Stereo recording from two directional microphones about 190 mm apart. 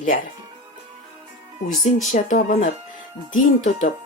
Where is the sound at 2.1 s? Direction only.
45° left (ahead or behind).